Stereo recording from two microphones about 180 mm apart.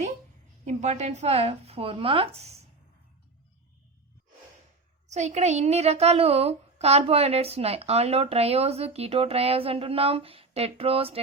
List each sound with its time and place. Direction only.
0.7 s speech: 35° right (ahead or behind)
5.0 s speech: 40° right (ahead or behind)